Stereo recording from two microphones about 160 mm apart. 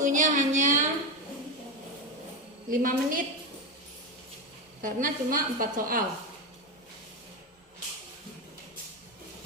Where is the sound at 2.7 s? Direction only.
60° right (ahead or behind).